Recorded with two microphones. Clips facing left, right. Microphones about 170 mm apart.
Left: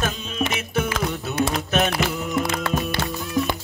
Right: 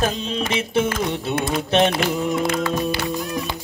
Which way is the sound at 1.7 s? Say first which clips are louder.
Right 5 dB; 25° right (ahead or behind).